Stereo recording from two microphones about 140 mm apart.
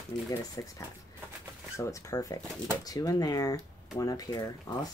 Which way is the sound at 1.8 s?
20° left (ahead or behind).